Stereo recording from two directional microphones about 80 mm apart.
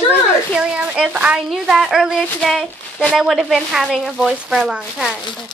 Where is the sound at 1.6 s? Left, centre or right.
Centre.